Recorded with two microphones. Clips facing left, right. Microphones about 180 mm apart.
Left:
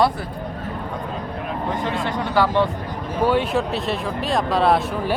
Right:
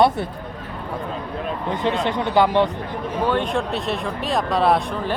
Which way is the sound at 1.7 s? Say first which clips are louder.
Right 4 dB; 20° right (ahead or behind).